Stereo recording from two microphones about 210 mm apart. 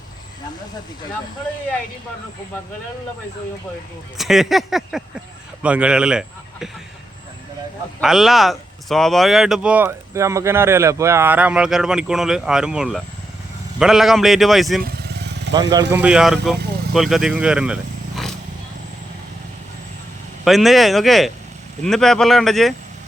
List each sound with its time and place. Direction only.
4.2 s speech: centre (ahead or behind)
8.0 s speech: centre (ahead or behind)
14.8 s vehicle: 50° right (ahead or behind)
15.7 s speech: 15° right (ahead or behind)
20.4 s speech: centre (ahead or behind)